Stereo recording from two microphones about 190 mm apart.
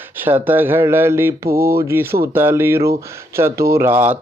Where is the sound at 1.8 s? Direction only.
15° right (ahead or behind).